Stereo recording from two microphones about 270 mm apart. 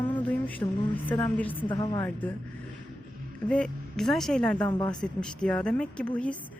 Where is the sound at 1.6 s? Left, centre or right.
Centre.